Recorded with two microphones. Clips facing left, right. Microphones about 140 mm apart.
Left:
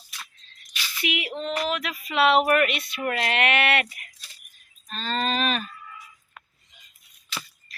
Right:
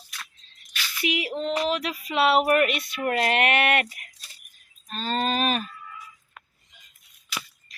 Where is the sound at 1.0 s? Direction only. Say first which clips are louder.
Right 2 dB; 35° right (ahead or behind).